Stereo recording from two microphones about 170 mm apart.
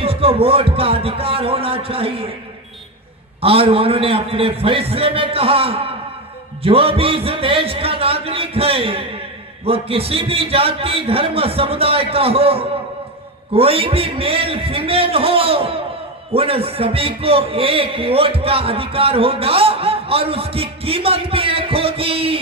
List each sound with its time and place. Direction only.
0.0 s a man's voice: 35° right (ahead or behind)
3.3 s a man's voice: 35° right (ahead or behind)